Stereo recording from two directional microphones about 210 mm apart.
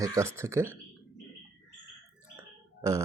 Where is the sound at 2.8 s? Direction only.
15° right (ahead or behind).